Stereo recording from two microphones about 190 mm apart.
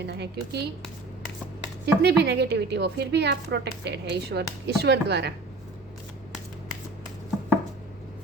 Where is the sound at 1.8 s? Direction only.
60° right (ahead or behind).